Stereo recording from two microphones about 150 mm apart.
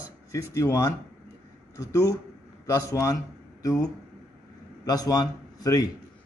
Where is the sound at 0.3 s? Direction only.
20° left (ahead or behind).